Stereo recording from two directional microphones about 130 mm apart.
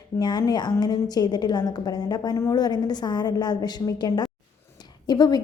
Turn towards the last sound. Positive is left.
turn(degrees=30)  # may be behind; listen again after turning